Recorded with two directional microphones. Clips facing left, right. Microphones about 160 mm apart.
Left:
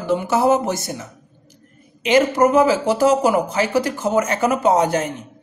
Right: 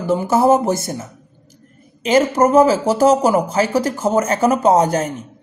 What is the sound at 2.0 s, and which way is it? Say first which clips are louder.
A woman's voice: right 1 dB; 40° right (ahead or behind).